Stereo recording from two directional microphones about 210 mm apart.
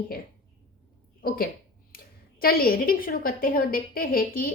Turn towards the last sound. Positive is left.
turn(degrees=45)  # may be behind; listen again after turning